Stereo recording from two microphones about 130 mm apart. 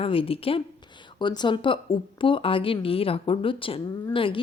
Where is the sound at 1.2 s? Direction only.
35° left (ahead or behind).